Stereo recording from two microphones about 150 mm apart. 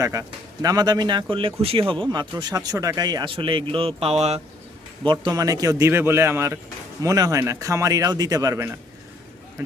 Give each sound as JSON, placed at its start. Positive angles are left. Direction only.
{"t": 0.0, "sound": "speech", "side_deg": -20}
{"t": 5.2, "sound": "speech", "side_deg": -25}